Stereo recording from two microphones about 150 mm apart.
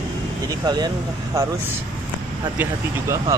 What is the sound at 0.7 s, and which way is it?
Speech, 25° right (ahead or behind).